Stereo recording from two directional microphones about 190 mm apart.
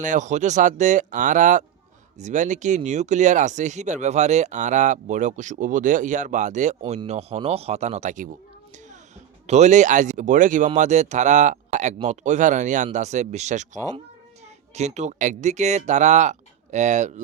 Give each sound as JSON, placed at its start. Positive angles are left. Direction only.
{"t": 0.0, "sound": "speech", "side_deg": -40}
{"t": 9.5, "sound": "speech", "side_deg": -35}